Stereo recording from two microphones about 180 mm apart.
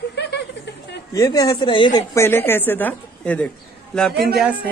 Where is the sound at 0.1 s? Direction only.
70° left (ahead or behind).